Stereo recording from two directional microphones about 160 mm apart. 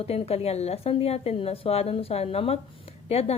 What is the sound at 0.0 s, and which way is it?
Speech, 40° left (ahead or behind).